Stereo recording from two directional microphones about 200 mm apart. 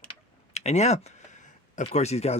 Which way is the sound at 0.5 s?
35° left (ahead or behind).